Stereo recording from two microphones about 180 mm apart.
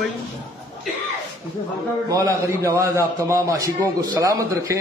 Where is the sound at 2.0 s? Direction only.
15° right (ahead or behind).